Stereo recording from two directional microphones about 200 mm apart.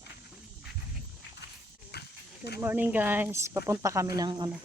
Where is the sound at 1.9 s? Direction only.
55° left (ahead or behind).